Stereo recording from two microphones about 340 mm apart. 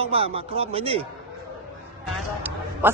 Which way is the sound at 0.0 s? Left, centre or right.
Centre.